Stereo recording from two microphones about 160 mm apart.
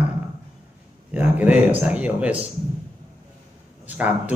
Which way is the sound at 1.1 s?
10° right (ahead or behind).